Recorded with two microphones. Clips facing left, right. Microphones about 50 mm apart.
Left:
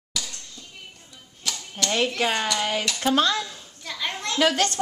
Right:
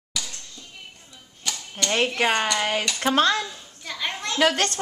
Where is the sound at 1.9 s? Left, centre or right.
Right.